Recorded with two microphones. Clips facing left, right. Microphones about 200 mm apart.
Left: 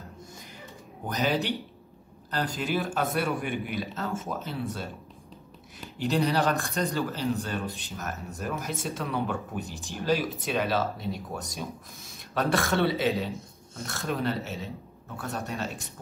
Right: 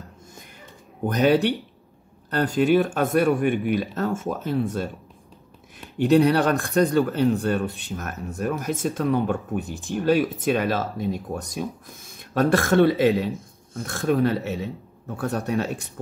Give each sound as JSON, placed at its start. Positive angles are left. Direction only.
{"t": 1.0, "sound": "speech", "side_deg": -55}
{"t": 5.9, "sound": "speech", "side_deg": -60}